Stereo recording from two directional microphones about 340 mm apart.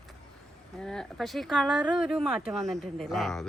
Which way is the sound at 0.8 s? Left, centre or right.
Centre.